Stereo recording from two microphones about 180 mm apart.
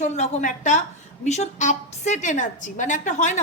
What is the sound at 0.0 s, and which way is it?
A woman's voice, 40° left (ahead or behind).